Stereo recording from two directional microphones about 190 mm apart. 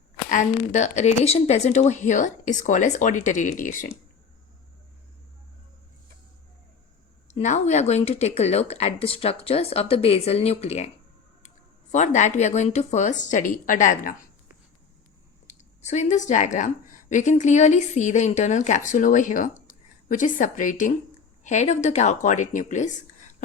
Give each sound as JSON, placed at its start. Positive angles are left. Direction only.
{"t": 0.3, "sound": "speech", "side_deg": 40}
{"t": 7.3, "sound": "speech", "side_deg": 35}
{"t": 15.4, "sound": "a woman's voice", "side_deg": 40}